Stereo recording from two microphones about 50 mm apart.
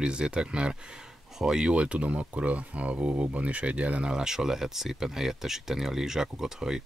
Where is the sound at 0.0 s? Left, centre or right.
Centre.